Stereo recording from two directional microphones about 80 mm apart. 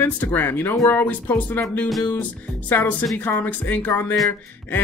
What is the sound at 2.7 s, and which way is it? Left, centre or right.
Speech, left.